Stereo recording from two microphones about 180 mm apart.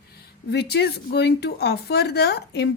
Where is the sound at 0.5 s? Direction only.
65° left (ahead or behind).